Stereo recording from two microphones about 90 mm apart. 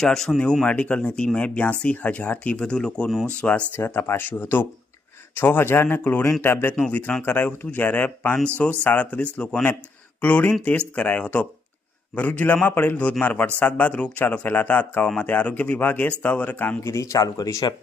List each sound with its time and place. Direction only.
0.0 s a man's voice: 5° left (ahead or behind)
3.8 s a man's voice: 25° left (ahead or behind)
16.8 s speech: 35° left (ahead or behind)